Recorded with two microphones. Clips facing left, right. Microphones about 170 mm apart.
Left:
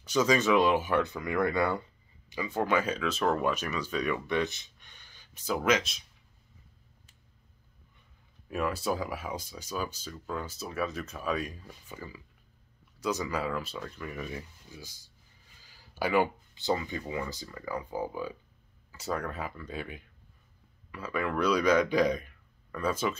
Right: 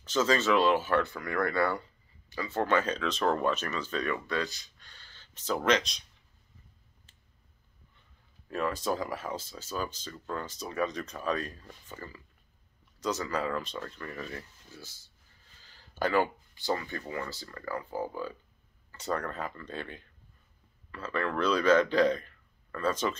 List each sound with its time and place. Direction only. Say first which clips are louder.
0.0 s speech: left 1 dB; 10° left (ahead or behind)
8.5 s speech: even; 10° left (ahead or behind)